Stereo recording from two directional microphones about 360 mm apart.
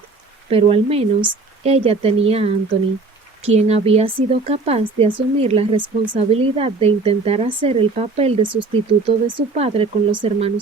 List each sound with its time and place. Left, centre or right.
0.5 s speech: centre